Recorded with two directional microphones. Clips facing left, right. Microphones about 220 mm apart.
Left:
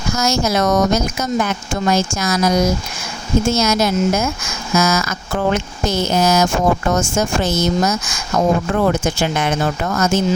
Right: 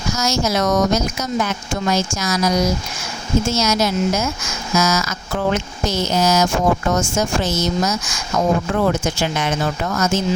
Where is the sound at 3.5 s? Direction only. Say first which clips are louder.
Left 2 dB; 55° left (ahead or behind).